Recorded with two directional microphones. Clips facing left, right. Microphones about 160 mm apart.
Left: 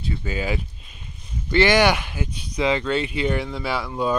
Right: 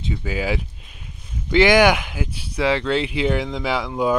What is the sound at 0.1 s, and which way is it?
Speech, 10° right (ahead or behind).